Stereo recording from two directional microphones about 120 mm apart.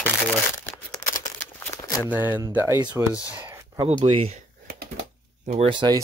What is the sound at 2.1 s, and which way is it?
Speech, 15° right (ahead or behind).